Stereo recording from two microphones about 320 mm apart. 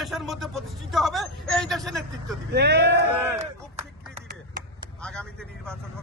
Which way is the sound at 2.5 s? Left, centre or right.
Right.